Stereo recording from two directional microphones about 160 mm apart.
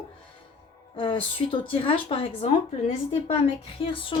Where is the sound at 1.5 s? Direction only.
35° left (ahead or behind).